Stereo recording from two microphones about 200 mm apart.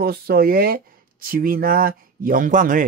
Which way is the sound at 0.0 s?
50° right (ahead or behind).